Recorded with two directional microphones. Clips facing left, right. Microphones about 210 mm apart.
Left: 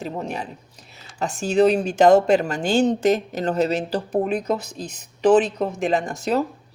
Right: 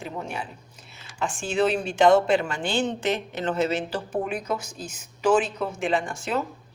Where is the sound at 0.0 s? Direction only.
35° left (ahead or behind).